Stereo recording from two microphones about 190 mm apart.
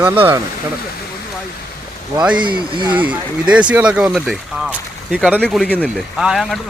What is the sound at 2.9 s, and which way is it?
Speech, 10° right (ahead or behind).